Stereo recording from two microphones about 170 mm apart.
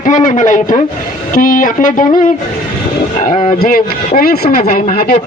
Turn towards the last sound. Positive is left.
turn(degrees=60)  # may be behind; listen again after turning